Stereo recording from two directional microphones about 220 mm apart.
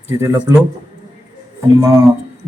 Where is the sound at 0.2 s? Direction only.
15° right (ahead or behind).